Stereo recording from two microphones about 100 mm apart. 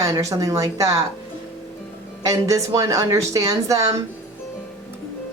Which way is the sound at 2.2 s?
30° right (ahead or behind).